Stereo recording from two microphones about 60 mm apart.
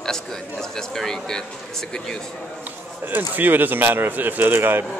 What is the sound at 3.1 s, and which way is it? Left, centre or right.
Speech, right.